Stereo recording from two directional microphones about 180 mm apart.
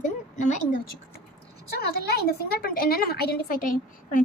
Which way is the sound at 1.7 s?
60° left (ahead or behind).